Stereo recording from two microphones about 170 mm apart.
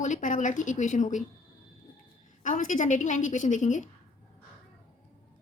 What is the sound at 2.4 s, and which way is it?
A woman's voice, 50° left (ahead or behind).